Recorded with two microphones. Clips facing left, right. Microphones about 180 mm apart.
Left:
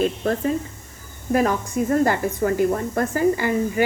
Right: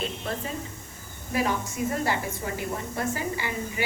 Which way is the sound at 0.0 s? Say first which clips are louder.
Left 11 dB; 50° left (ahead or behind).